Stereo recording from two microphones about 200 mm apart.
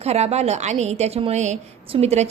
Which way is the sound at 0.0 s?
30° right (ahead or behind).